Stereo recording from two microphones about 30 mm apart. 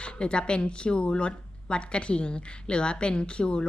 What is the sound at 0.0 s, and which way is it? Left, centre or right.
A woman's voice, left.